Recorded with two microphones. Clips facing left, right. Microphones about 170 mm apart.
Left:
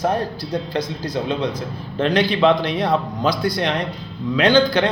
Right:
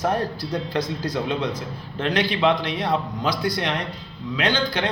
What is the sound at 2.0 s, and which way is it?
A man's voice, 30° left (ahead or behind).